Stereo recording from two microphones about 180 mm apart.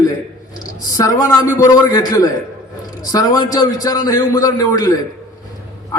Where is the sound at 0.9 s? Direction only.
20° left (ahead or behind).